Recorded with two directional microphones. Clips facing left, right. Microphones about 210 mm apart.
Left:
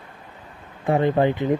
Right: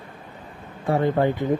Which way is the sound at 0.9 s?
20° left (ahead or behind).